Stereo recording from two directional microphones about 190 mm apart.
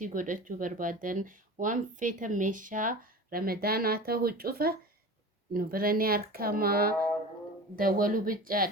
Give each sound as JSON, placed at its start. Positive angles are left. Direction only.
{"t": 0.0, "sound": "speech", "side_deg": -45}